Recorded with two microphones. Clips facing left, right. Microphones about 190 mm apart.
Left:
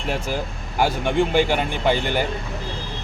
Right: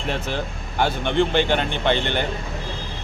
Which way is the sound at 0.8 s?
5° left (ahead or behind).